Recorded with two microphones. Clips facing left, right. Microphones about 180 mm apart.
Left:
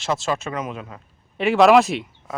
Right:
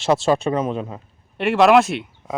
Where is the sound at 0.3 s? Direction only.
35° right (ahead or behind).